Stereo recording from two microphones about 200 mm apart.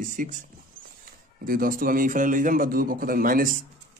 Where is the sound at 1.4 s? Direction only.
45° right (ahead or behind).